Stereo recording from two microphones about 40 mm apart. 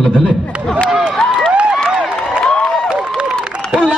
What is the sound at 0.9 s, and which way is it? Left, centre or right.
Speech, centre.